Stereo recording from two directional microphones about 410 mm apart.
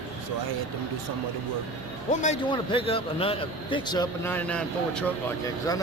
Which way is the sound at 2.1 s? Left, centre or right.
Centre.